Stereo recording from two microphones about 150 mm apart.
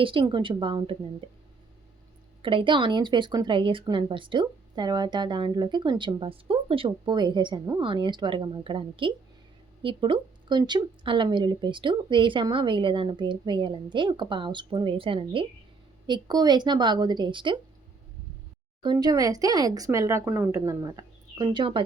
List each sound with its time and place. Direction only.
0.0 s a woman's voice: 35° right (ahead or behind)
2.4 s a woman's voice: 35° right (ahead or behind)
18.8 s speech: 30° right (ahead or behind)